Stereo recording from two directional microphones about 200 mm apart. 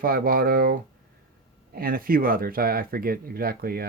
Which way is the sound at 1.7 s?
45° right (ahead or behind).